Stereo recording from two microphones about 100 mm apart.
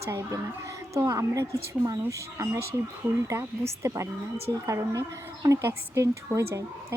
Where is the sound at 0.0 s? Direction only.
25° right (ahead or behind).